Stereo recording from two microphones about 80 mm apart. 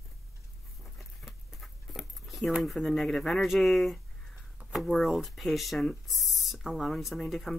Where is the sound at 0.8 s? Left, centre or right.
Centre.